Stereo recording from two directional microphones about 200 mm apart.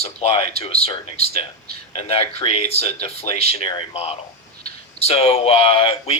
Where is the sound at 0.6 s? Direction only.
30° left (ahead or behind).